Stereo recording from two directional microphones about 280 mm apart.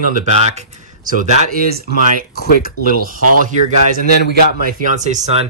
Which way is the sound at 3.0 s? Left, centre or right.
Right.